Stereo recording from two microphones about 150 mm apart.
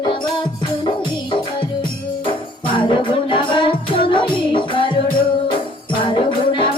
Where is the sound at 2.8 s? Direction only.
35° left (ahead or behind).